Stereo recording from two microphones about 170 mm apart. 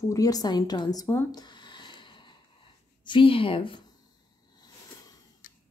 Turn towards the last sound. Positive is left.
turn(degrees=30)  # may be behind; listen again after turning